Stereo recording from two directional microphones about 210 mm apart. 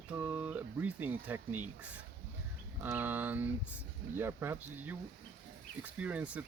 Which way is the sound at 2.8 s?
10° right (ahead or behind).